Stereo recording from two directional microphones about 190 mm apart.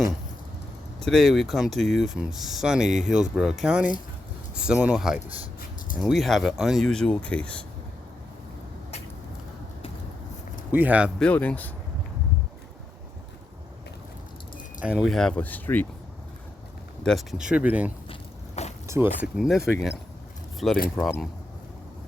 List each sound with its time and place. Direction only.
1.0 s speech: centre (ahead or behind)
10.7 s speech: 10° right (ahead or behind)
11.2 s speech: 5° left (ahead or behind)
14.8 s speech: 5° right (ahead or behind)
17.0 s speech: centre (ahead or behind)
18.1 s a sound: 35° left (ahead or behind)
18.9 s speech: 10° right (ahead or behind)